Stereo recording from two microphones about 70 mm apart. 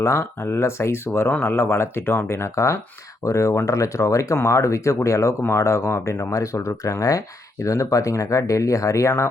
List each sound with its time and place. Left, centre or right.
0.0 s speech: left